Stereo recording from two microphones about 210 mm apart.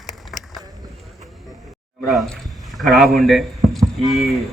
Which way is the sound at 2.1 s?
Centre (ahead or behind).